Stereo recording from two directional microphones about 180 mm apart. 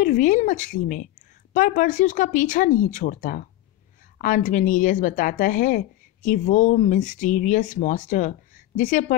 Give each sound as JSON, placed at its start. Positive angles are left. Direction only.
{"t": 0.0, "sound": "a woman's voice", "side_deg": 45}